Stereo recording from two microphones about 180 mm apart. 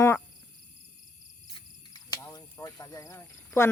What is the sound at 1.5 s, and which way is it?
Cricket, 20° left (ahead or behind).